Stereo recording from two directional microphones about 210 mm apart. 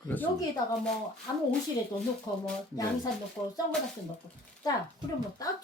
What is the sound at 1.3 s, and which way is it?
Speech, 15° left (ahead or behind).